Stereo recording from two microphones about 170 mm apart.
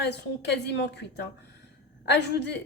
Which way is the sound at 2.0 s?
90° left.